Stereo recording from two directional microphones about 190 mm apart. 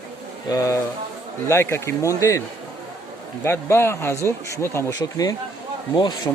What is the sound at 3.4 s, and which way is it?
Speech, 15° left (ahead or behind).